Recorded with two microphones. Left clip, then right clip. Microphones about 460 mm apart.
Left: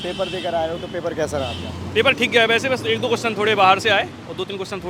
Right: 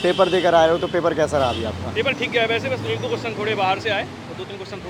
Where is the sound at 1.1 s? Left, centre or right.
Centre.